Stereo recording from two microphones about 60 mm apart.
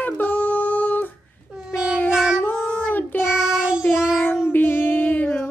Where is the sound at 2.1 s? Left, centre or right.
Centre.